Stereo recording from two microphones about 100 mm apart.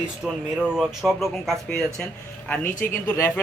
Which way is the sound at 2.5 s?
20° left (ahead or behind).